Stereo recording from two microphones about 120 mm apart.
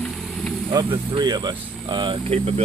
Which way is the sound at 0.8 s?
40° right (ahead or behind).